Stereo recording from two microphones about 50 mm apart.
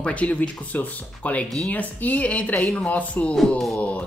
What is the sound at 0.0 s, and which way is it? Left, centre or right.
Speech, left.